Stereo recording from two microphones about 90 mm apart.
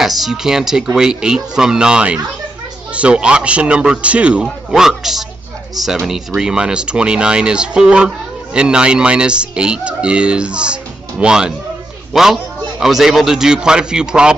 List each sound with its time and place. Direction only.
0.0 s speech: 5° right (ahead or behind)